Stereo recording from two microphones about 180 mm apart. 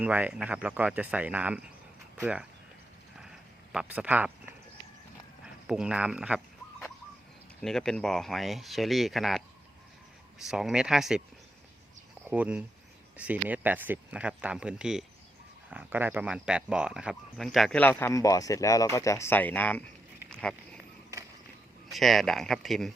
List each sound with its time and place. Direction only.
0.0 s speech: 10° right (ahead or behind)
3.2 s a sound: 5° right (ahead or behind)
5.6 s speech: 5° right (ahead or behind)
7.6 s speech: 5° left (ahead or behind)
12.3 s speech: 10° right (ahead or behind); by 19.8 s 10° left (ahead or behind)
20.3 s a sound: 5° left (ahead or behind)
21.9 s speech: centre (ahead or behind)